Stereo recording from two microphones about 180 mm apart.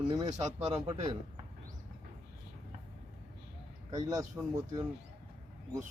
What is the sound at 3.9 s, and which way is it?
Speech, 20° right (ahead or behind).